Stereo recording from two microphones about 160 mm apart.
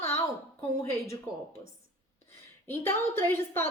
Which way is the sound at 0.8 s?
20° left (ahead or behind).